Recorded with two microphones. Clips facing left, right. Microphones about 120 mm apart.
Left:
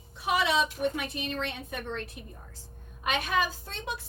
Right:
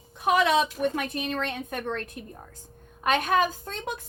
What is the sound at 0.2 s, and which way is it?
A woman's voice, 50° right (ahead or behind).